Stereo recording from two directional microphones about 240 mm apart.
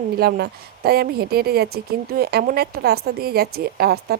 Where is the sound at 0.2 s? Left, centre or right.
Right.